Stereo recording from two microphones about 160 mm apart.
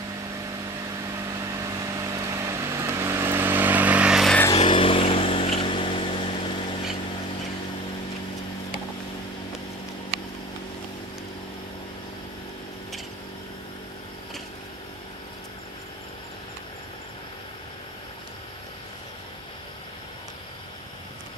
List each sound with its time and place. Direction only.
1.1 s vehicle: 20° right (ahead or behind); by 4.4 s centre (ahead or behind)
4.6 s vehicle: 35° left (ahead or behind)